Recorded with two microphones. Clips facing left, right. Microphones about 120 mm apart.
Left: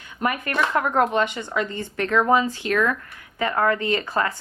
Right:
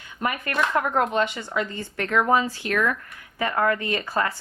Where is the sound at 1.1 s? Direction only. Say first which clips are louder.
Left 1 dB; 20° left (ahead or behind).